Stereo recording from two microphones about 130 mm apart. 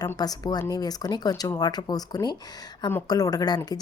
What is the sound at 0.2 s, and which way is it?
Speech, 30° left (ahead or behind).